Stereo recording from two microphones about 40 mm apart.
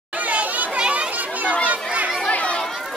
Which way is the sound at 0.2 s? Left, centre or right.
Right.